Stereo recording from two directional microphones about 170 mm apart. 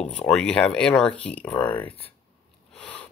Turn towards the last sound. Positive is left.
turn(degrees=10)  # may be behind; listen again after turning